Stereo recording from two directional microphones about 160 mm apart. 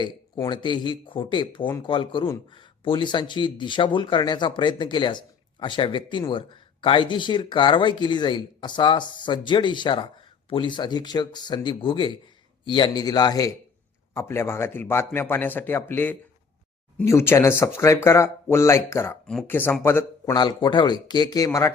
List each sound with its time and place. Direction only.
0.0 s speech: 30° left (ahead or behind)
20.3 s speech: 25° left (ahead or behind)